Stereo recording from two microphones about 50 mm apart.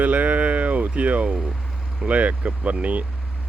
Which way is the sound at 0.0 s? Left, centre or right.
Right.